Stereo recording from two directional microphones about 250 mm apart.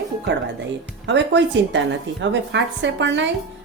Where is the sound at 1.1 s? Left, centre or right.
Right.